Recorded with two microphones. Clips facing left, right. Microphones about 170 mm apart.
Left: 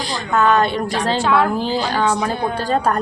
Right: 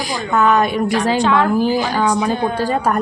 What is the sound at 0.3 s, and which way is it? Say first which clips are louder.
Speech: right 1 dB; 15° right (ahead or behind).